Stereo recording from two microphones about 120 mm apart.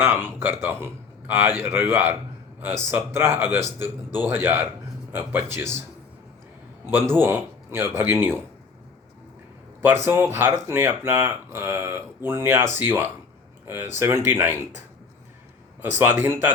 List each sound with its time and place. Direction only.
0.0 s speech: 20° right (ahead or behind)
6.9 s speech: 20° right (ahead or behind)
9.8 s speech: 20° right (ahead or behind)
15.8 s speech: 15° right (ahead or behind)